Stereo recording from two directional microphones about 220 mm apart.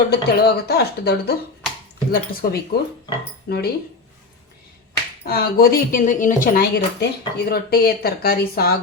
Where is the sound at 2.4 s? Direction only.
45° left (ahead or behind).